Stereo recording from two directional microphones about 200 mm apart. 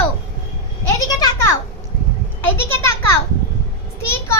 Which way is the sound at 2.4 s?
10° left (ahead or behind).